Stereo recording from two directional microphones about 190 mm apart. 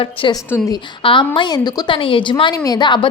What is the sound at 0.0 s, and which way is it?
A woman's voice, 25° left (ahead or behind).